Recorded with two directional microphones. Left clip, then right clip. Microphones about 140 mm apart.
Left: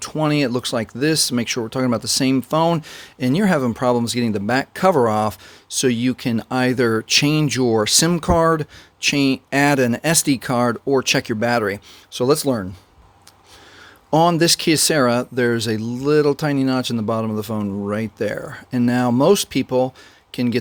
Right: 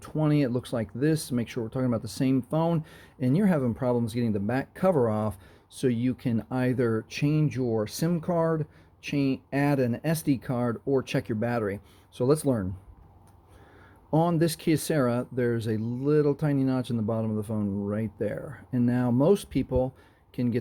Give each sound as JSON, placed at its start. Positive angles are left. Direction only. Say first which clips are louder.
{"t": 0.0, "sound": "speech", "louder": "left 7 dB", "side_deg": 30}
{"t": 14.1, "sound": "speech", "louder": "left 10 dB", "side_deg": 35}